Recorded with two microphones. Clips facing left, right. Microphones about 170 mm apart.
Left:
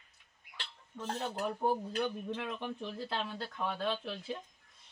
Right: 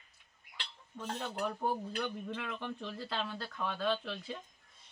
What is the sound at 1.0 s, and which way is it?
Speech, 20° left (ahead or behind).